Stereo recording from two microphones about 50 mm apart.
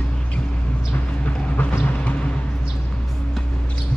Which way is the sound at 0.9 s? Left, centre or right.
Left.